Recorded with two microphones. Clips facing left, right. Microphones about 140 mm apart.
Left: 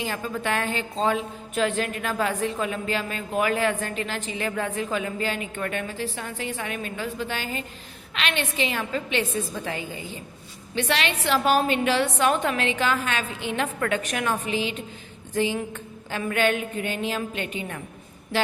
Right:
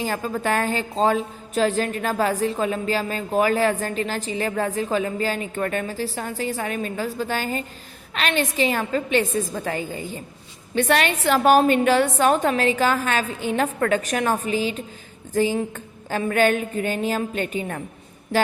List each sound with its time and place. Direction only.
0.0 s a woman's voice: 40° right (ahead or behind)